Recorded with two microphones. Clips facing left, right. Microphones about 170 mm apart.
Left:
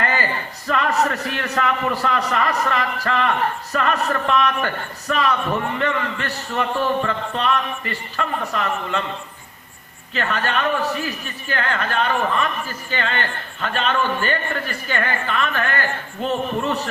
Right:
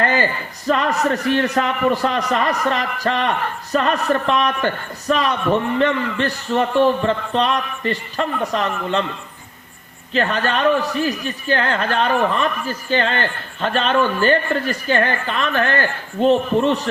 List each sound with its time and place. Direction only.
0.7 s a man's voice: 30° right (ahead or behind)
10.2 s speech: 30° right (ahead or behind)